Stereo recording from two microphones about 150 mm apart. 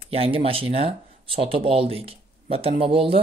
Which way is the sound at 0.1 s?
40° right (ahead or behind).